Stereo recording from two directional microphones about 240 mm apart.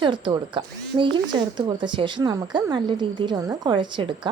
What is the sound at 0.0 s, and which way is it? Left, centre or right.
A woman's voice, centre.